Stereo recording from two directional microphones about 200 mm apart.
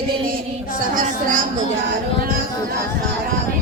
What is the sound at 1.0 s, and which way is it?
Speech, 40° right (ahead or behind).